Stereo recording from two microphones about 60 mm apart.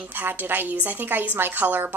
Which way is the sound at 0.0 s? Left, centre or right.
Right.